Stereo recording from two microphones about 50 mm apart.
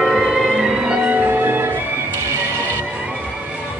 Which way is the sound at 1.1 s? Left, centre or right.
Right.